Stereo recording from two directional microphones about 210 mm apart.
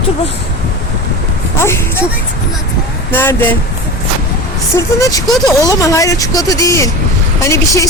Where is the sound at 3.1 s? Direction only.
10° left (ahead or behind).